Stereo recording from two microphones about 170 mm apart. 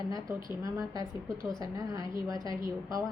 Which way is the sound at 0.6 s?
20° right (ahead or behind).